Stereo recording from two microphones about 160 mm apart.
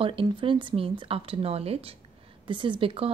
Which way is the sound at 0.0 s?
35° right (ahead or behind).